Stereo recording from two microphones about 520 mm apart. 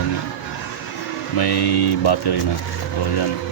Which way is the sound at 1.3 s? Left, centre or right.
Left.